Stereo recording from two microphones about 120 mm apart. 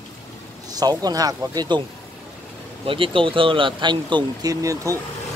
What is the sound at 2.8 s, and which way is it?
Speech, 45° right (ahead or behind).